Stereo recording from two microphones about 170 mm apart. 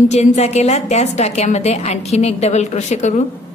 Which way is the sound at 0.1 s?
40° left (ahead or behind).